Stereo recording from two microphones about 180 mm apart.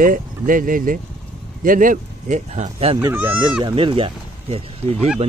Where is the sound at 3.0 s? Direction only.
10° right (ahead or behind).